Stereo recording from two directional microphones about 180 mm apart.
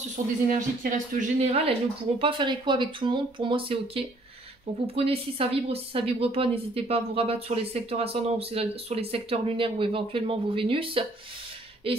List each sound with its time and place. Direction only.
0.1 s a woman's voice: 45° right (ahead or behind); by 11.1 s 30° right (ahead or behind)